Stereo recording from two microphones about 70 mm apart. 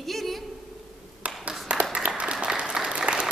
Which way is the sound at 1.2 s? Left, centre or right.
Centre.